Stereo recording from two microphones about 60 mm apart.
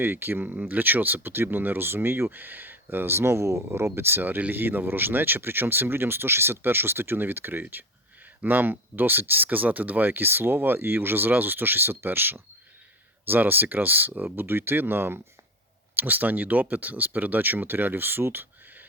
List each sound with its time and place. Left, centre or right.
0.0 s speech: right